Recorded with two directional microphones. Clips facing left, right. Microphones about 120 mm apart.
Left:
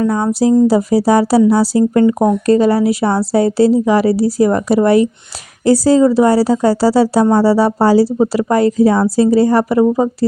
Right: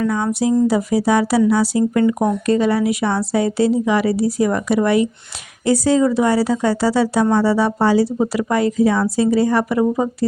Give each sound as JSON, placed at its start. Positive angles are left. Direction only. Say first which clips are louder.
{"t": 0.0, "sound": "speech", "louder": "left 5 dB", "side_deg": 35}